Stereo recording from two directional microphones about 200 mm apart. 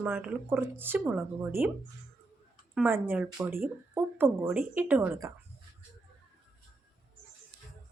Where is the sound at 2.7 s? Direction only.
10° right (ahead or behind).